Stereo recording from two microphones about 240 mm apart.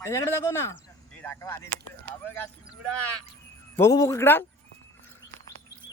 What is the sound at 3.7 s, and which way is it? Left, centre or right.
Speech, centre.